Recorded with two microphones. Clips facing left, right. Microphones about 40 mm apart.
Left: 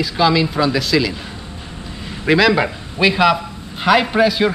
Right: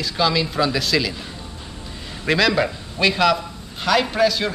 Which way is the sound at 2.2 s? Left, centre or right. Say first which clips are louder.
Left 4 dB; centre.